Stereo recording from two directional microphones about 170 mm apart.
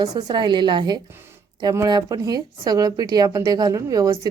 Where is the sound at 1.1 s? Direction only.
15° right (ahead or behind).